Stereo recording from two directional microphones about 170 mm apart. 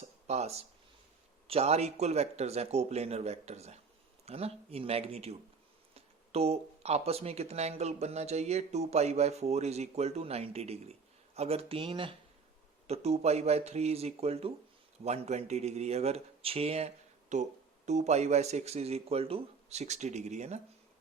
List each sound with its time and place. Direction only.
0.3 s speech: 40° right (ahead or behind)